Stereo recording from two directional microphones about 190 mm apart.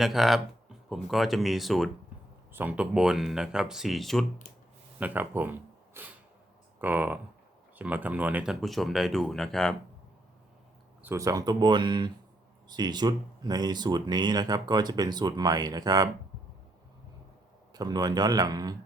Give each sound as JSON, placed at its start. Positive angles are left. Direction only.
{"t": 0.0, "sound": "speech", "side_deg": 0}
{"t": 4.9, "sound": "speech", "side_deg": -10}
{"t": 11.0, "sound": "speech", "side_deg": -15}
{"t": 17.7, "sound": "speech", "side_deg": -20}